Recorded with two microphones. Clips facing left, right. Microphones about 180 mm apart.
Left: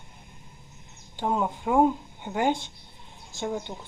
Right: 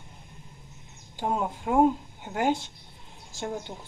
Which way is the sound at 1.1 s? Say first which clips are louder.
Left 2 dB; 5° right (ahead or behind).